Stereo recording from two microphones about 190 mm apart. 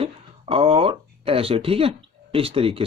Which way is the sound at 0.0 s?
30° right (ahead or behind).